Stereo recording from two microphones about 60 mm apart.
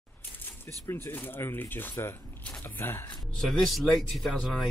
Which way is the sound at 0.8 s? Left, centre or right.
Left.